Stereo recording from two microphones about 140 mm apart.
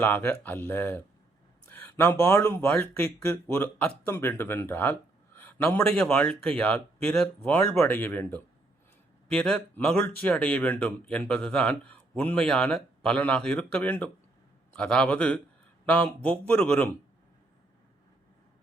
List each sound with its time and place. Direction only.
0.0 s speech: 15° left (ahead or behind)